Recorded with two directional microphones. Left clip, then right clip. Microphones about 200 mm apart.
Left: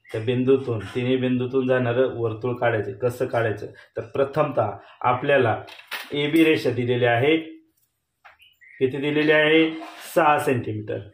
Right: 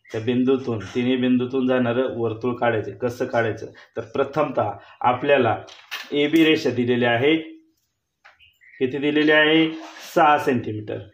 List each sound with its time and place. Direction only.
0.3 s a man's voice: 40° right (ahead or behind)
8.7 s a man's voice: 40° right (ahead or behind)